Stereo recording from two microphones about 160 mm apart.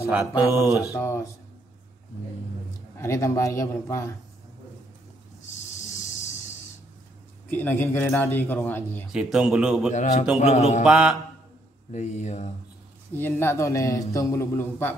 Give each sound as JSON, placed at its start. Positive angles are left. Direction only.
{"t": 0.5, "sound": "speech", "side_deg": 0}
{"t": 0.7, "sound": "speech", "side_deg": 20}
{"t": 3.0, "sound": "a man's voice", "side_deg": 15}
{"t": 5.9, "sound": "a sound", "side_deg": 50}
{"t": 7.4, "sound": "a man's voice", "side_deg": 10}
{"t": 9.1, "sound": "speech", "side_deg": -5}
{"t": 9.9, "sound": "speech", "side_deg": 50}
{"t": 10.4, "sound": "mantra", "side_deg": 40}
{"t": 10.8, "sound": "speech", "side_deg": -5}
{"t": 11.9, "sound": "speech", "side_deg": 45}
{"t": 13.1, "sound": "a man's voice", "side_deg": 15}